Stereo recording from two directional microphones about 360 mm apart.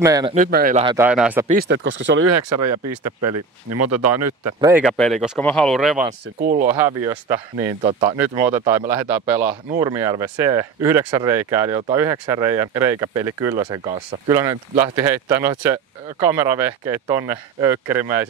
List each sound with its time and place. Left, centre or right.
0.0 s speech: centre
0.9 s speech: centre
1.5 s speech: right
4.6 s speech: centre